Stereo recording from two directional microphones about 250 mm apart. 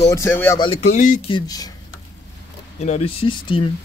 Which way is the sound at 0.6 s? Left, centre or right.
Left.